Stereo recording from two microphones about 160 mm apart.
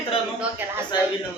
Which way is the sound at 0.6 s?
15° right (ahead or behind).